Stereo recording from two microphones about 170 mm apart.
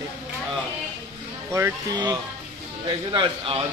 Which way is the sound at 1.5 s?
20° right (ahead or behind).